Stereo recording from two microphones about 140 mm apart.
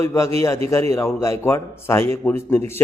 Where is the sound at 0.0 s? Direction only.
20° left (ahead or behind).